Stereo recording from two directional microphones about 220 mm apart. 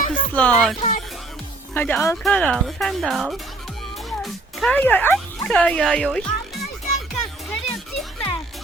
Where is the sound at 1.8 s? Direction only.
10° left (ahead or behind).